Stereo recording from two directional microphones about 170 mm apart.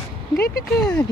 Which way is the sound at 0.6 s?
5° left (ahead or behind).